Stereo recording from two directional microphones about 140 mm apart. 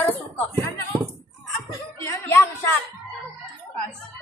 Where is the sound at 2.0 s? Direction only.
15° left (ahead or behind).